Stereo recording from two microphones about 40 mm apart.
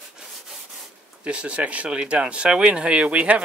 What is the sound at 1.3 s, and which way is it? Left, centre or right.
Speech, right.